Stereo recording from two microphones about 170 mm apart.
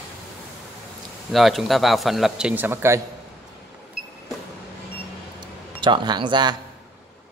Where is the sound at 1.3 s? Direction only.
Centre (ahead or behind).